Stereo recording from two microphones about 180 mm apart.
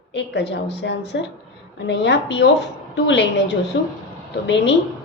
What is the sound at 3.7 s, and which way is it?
A woman's voice, 90° left.